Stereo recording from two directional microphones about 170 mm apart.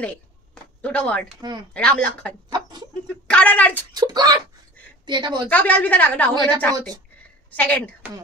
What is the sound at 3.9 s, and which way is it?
A woman's voice, 25° right (ahead or behind).